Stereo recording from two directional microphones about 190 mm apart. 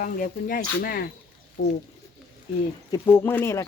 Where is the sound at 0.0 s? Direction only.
50° left (ahead or behind).